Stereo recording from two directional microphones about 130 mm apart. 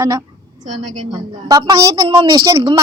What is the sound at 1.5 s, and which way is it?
A woman's voice, 30° right (ahead or behind).